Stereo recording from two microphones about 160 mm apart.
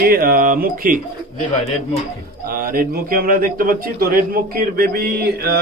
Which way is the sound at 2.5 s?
65° right (ahead or behind).